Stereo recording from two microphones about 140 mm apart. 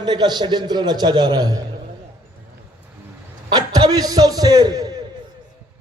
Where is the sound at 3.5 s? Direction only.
30° right (ahead or behind).